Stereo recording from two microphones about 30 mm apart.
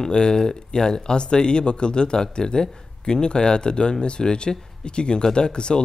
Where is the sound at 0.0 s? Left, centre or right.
Left.